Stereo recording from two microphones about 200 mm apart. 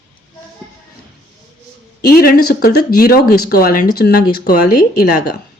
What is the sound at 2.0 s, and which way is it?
Speech, 50° left (ahead or behind).